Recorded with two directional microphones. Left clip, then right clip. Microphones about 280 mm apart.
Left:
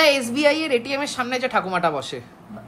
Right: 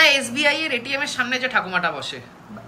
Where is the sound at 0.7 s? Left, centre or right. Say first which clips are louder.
Left 1 dB; centre.